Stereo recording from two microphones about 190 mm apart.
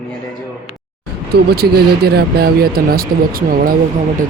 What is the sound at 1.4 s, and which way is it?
Speech, 55° right (ahead or behind).